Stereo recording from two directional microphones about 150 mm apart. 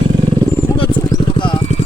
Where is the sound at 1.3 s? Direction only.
35° left (ahead or behind).